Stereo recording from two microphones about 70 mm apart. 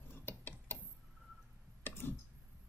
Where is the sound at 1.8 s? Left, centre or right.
Left.